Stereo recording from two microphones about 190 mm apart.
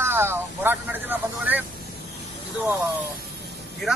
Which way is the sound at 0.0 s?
10° right (ahead or behind).